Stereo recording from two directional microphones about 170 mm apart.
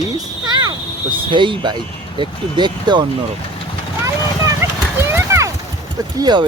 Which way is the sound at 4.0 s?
15° right (ahead or behind).